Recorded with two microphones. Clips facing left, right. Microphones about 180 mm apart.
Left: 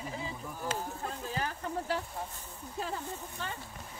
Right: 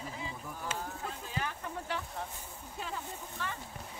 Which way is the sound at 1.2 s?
40° left (ahead or behind).